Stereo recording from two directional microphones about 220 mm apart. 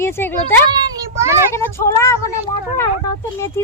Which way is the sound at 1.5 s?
10° left (ahead or behind).